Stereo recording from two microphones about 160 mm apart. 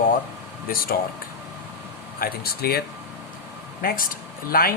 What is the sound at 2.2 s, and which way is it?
Speech, 75° left (ahead or behind).